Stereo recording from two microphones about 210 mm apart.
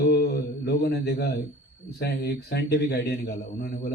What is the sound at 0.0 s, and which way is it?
Mantra, 50° left (ahead or behind).